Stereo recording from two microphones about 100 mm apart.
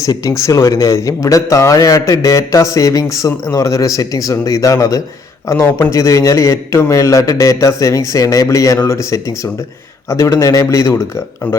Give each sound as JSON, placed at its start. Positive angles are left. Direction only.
{"t": 0.0, "sound": "a man's voice", "side_deg": 30}